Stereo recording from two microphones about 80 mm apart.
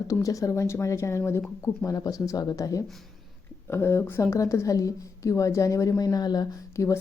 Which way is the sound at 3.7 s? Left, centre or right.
Left.